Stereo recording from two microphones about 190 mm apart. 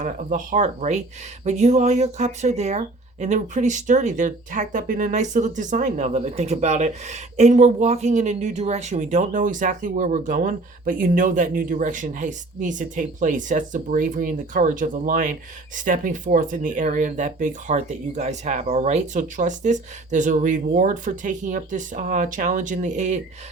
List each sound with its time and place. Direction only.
0.0 s speech: 45° right (ahead or behind)